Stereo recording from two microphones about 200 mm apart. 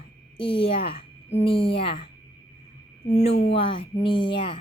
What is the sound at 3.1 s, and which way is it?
Speech, 35° left (ahead or behind).